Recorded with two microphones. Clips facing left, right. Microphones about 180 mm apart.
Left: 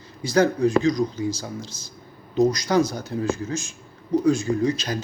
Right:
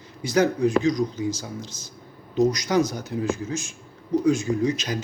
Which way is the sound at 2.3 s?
35° left (ahead or behind).